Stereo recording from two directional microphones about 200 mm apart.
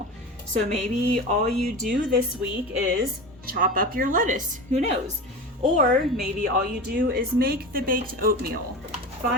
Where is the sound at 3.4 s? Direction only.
45° right (ahead or behind).